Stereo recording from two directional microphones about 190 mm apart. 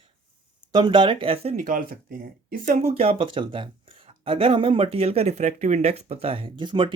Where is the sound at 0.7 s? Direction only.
25° right (ahead or behind).